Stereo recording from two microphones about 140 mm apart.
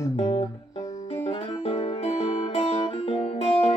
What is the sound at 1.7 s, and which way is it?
Music, 45° left (ahead or behind).